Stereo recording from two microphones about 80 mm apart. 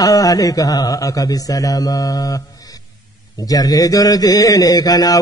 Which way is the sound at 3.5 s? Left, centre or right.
Left.